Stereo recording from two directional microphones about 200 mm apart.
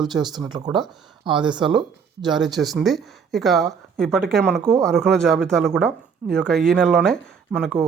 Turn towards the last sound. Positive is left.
turn(degrees=0)  # may be behind; listen again after turning